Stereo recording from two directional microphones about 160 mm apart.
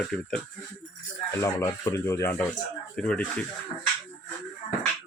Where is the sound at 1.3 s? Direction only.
15° left (ahead or behind).